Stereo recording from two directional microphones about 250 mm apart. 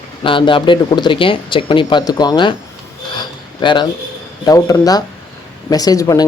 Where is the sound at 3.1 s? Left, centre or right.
Centre.